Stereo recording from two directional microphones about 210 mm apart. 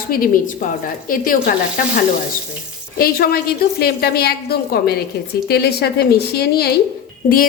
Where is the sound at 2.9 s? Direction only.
45° left (ahead or behind).